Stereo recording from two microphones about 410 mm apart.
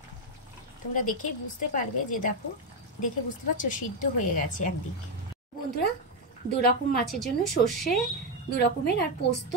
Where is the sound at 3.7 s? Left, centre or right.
Centre.